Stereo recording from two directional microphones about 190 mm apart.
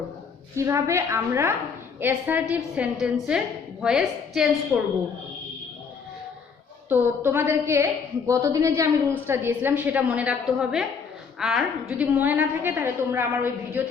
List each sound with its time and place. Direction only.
0.5 s a woman's voice: 15° right (ahead or behind)
6.8 s a woman's voice: 10° right (ahead or behind)